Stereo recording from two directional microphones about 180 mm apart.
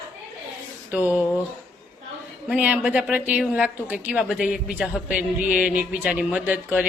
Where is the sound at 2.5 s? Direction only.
10° right (ahead or behind).